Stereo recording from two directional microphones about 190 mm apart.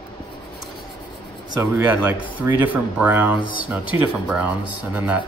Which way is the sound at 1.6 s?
10° right (ahead or behind).